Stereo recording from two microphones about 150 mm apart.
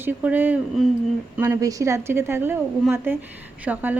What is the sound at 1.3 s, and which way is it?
A woman's voice, 15° right (ahead or behind).